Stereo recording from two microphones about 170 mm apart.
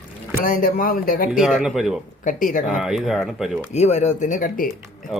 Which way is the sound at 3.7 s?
40° left (ahead or behind).